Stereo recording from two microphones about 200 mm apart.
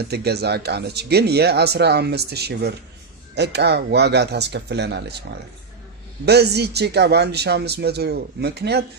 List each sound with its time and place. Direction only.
0.0 s speech: 55° right (ahead or behind)
6.2 s speech: 55° right (ahead or behind)